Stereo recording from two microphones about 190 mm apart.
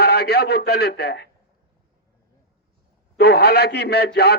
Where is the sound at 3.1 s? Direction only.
60° left (ahead or behind).